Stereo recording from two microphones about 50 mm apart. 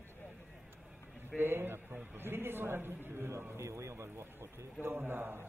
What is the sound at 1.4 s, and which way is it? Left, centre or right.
A man's voice, right.